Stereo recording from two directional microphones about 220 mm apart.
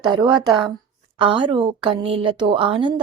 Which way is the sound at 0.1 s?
20° right (ahead or behind).